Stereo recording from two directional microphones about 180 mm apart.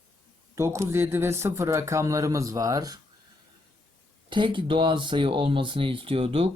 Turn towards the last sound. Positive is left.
turn(degrees=-30)  # may be behind; listen again after turning